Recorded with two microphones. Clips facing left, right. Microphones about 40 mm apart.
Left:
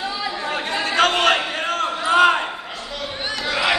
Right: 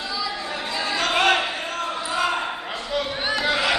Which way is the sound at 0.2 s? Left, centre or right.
Left.